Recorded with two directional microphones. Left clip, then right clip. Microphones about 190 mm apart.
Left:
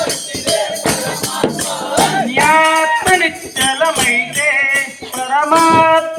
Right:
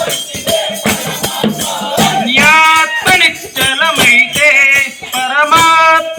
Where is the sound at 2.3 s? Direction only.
45° left (ahead or behind).